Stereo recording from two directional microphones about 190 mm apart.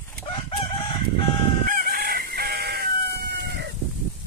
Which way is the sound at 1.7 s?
50° right (ahead or behind).